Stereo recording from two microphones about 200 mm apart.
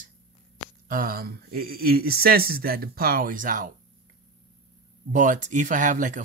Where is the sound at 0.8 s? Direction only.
45° right (ahead or behind).